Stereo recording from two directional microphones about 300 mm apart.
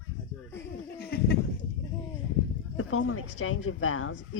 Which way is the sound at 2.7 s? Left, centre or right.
Left.